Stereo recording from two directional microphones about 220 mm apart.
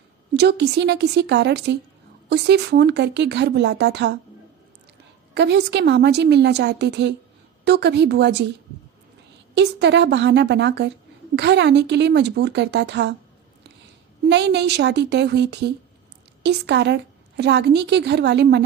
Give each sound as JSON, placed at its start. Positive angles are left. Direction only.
{"t": 0.3, "sound": "a woman's voice", "side_deg": -50}
{"t": 5.3, "sound": "a woman's voice", "side_deg": -50}
{"t": 9.6, "sound": "a woman's voice", "side_deg": -50}
{"t": 14.3, "sound": "a woman's voice", "side_deg": -50}